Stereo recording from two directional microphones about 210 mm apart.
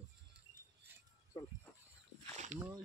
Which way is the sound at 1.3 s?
15° left (ahead or behind).